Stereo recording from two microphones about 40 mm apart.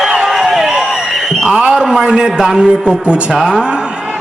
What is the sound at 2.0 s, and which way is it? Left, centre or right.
A man's voice, centre.